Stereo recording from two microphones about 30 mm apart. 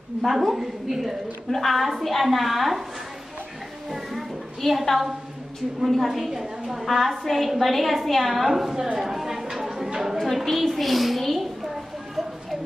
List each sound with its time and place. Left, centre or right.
0.2 s a woman's voice: centre
0.5 s a woman's voice: centre
1.5 s a woman's voice: centre
4.6 s a woman's voice: centre
5.9 s a woman's voice: centre
6.3 s a woman's voice: centre
6.9 s a woman's voice: centre
8.7 s speech: right
9.0 s a sound: centre
10.1 s a woman's voice: centre